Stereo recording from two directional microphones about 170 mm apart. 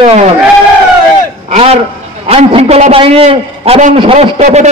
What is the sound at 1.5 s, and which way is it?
A man's voice, 35° right (ahead or behind).